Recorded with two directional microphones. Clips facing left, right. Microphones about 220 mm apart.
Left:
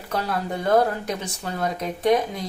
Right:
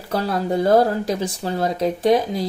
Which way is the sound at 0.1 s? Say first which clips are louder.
Right 5 dB; 35° right (ahead or behind).